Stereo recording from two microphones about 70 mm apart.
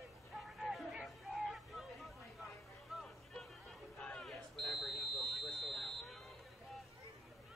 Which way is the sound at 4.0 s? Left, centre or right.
Centre.